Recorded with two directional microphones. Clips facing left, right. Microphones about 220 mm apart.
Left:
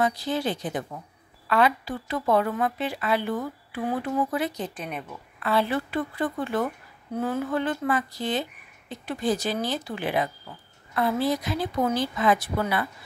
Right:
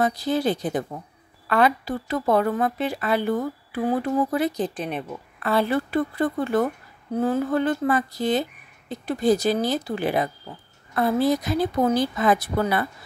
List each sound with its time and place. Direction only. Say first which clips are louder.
0.0 s a woman's voice: right 3 dB; 40° right (ahead or behind)
5.4 s a woman's voice: right 3 dB; 45° right (ahead or behind)